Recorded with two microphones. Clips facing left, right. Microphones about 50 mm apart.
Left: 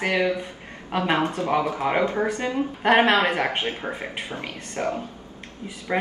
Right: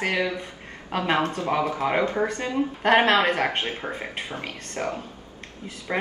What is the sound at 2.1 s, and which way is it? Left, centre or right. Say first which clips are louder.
Speech: left 1 dB; left.